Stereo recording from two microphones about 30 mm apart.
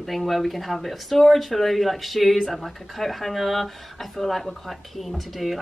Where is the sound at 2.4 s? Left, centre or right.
Centre.